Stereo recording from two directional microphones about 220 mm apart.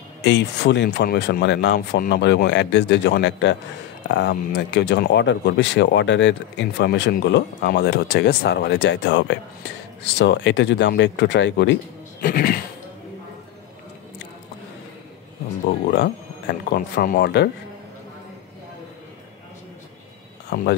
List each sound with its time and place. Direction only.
0.2 s speech: 50° left (ahead or behind)
16.7 s speech: 40° left (ahead or behind)
20.4 s a sound: 45° left (ahead or behind)